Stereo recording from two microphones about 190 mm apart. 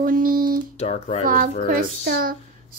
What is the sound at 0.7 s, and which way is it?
Speech, 35° left (ahead or behind).